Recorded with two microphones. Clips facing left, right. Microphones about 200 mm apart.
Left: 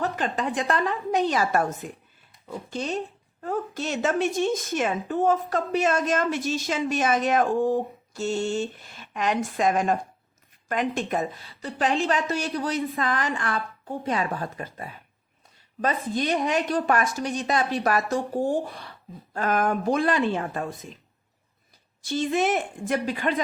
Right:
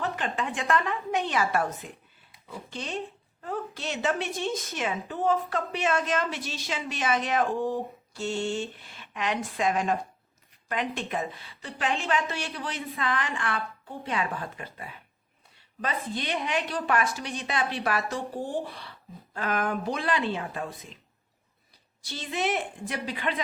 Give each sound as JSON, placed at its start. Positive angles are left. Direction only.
{"t": 0.0, "sound": "a woman's voice", "side_deg": 40}
{"t": 22.0, "sound": "a woman's voice", "side_deg": 50}